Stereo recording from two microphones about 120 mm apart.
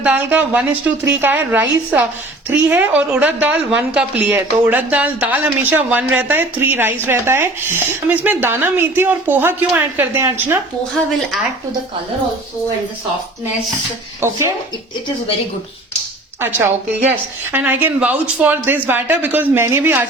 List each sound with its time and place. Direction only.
0.0 s a woman's voice: 15° right (ahead or behind)
14.2 s speech: 25° right (ahead or behind)
17.1 s a woman's voice: 15° right (ahead or behind)